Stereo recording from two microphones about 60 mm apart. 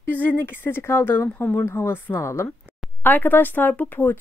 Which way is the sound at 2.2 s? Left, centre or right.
Left.